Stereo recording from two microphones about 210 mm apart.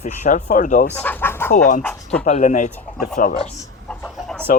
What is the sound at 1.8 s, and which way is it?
Speech, 5° left (ahead or behind).